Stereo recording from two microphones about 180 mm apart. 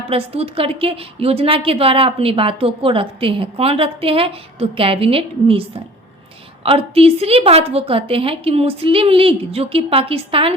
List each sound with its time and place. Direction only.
0.1 s a woman's voice: 30° right (ahead or behind)